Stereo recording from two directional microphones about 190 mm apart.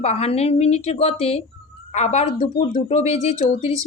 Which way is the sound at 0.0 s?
35° left (ahead or behind).